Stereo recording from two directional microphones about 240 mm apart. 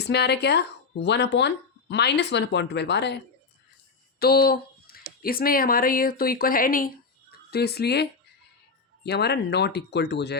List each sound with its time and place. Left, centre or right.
0.0 s speech: left
4.2 s a sound: left
5.2 s speech: left
9.0 s speech: left